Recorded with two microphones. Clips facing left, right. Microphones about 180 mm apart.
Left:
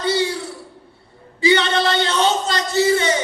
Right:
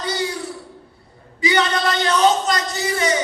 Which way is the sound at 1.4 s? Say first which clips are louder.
Left 3 dB; 30° left (ahead or behind).